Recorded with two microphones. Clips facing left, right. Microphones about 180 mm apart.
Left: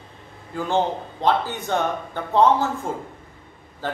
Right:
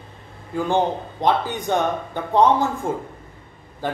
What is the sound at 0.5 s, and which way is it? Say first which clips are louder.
Speech: right 2 dB; 15° right (ahead or behind).